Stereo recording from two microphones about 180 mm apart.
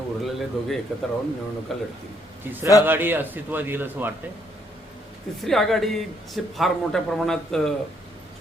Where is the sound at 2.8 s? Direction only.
10° right (ahead or behind).